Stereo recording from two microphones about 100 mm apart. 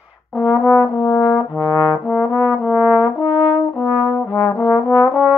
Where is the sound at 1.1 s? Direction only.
40° left (ahead or behind).